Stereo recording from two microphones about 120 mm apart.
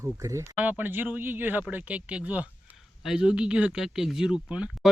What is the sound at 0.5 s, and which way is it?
Speech, 15° right (ahead or behind).